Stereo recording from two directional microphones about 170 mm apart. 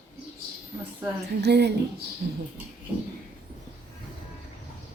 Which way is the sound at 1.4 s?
75° right (ahead or behind).